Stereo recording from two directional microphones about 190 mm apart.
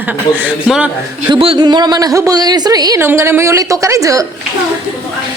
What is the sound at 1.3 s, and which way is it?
Speech, 25° right (ahead or behind).